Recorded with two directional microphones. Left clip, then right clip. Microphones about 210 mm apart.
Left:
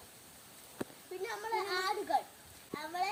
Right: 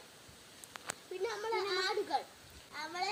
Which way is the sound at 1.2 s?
15° left (ahead or behind).